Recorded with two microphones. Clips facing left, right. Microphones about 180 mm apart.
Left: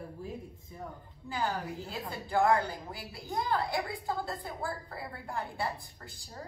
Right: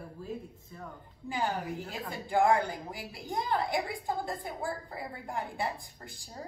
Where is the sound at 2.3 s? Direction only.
15° right (ahead or behind).